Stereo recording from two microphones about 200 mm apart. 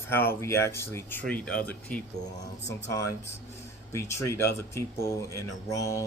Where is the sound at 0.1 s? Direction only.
10° left (ahead or behind).